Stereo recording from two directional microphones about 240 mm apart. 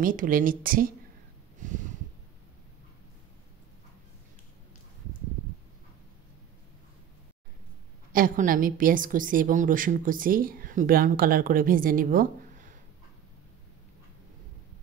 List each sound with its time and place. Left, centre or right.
0.0 s a woman's voice: right
8.1 s a woman's voice: right